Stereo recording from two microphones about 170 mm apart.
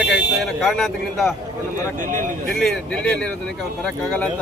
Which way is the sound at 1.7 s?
50° right (ahead or behind).